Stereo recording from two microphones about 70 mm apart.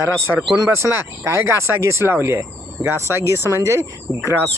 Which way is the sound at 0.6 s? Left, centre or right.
Right.